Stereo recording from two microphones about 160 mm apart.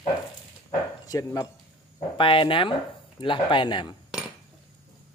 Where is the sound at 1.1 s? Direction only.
20° left (ahead or behind).